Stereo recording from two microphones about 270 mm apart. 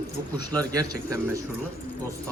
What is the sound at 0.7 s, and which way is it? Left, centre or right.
Speech, centre.